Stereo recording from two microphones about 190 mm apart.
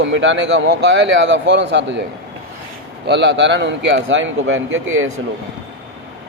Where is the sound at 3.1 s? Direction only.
70° right (ahead or behind); by 5.0 s 90° right.